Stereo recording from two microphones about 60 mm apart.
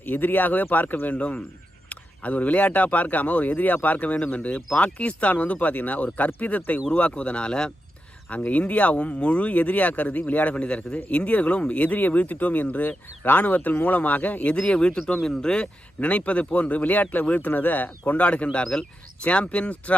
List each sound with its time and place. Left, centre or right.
0.0 s speech: left
1.1 s speech: left
8.3 s speech: left